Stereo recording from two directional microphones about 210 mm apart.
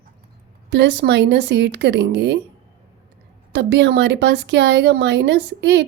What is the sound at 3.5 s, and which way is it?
A woman's voice, 55° right (ahead or behind).